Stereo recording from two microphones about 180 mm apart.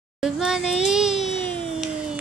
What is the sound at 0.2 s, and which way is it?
Speech, 5° right (ahead or behind).